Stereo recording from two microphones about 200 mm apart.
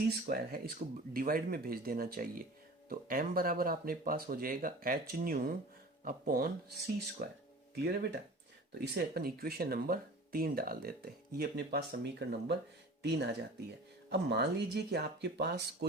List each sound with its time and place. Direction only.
0.1 s speech: 50° right (ahead or behind)
8.8 s speech: 55° right (ahead or behind)